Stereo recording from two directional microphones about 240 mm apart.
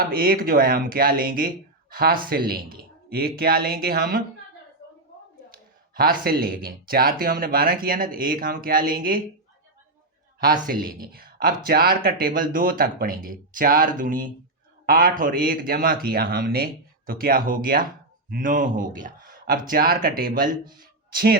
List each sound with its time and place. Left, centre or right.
0.1 s speech: right
5.9 s speech: right
10.7 s speech: right